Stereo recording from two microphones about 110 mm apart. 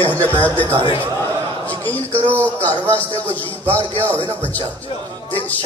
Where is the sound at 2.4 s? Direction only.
15° left (ahead or behind).